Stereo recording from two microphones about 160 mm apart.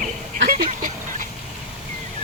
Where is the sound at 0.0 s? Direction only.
55° right (ahead or behind).